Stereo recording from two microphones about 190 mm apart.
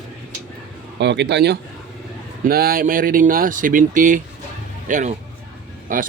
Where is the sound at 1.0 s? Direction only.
65° right (ahead or behind).